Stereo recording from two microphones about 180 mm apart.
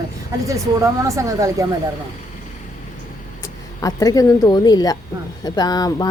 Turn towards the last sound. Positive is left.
turn(degrees=20)  # may be behind; listen again after turning